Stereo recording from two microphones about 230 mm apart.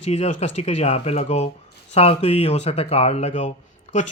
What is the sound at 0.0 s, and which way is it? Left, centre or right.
Speech, left.